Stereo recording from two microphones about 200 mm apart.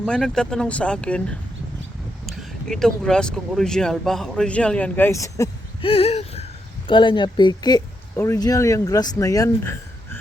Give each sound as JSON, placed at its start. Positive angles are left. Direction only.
{"t": 0.0, "sound": "speech", "side_deg": 5}
{"t": 5.8, "sound": "speech", "side_deg": 30}